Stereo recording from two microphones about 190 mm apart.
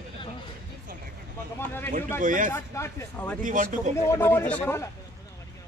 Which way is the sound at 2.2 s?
45° right (ahead or behind).